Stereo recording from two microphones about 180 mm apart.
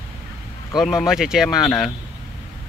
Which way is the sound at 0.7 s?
Centre (ahead or behind).